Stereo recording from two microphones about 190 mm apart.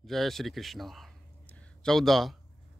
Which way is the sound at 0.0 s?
Centre (ahead or behind).